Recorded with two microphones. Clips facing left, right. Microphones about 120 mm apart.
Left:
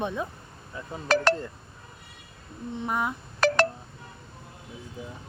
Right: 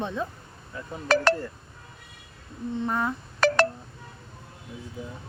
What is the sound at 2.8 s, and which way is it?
Speech, 10° left (ahead or behind).